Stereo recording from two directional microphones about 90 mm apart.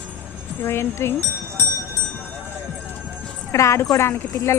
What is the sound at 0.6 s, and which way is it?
Speech, 25° left (ahead or behind).